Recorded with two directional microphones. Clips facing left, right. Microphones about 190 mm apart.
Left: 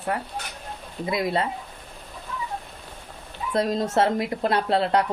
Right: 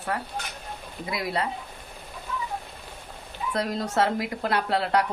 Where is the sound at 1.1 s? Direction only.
25° left (ahead or behind).